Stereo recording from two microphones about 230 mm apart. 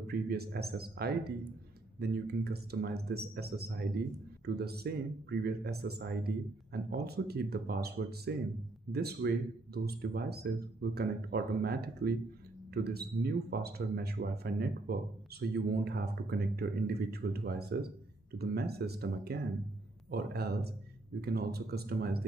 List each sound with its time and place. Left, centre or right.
0.0 s speech: right